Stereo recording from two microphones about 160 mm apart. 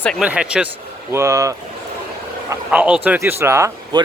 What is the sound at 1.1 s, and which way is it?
Speech, 15° right (ahead or behind).